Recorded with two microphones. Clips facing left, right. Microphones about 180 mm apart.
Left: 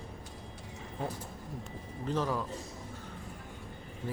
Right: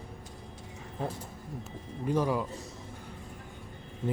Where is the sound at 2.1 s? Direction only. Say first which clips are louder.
Right 4 dB; 10° right (ahead or behind).